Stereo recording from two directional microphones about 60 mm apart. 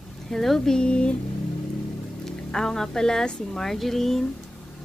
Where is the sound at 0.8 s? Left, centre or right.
Centre.